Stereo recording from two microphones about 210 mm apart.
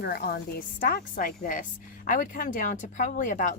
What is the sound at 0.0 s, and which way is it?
A woman's voice, 45° left (ahead or behind).